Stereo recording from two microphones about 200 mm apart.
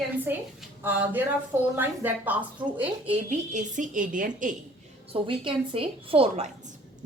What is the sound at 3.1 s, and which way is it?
A woman's voice, 40° right (ahead or behind).